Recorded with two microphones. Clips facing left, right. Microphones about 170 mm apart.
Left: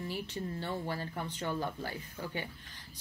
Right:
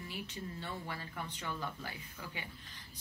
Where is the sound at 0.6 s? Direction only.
35° left (ahead or behind).